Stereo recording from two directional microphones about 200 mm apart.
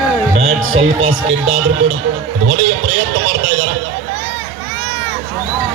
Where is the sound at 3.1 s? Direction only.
90° right.